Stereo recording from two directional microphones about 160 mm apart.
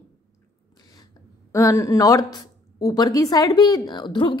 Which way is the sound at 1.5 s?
20° left (ahead or behind).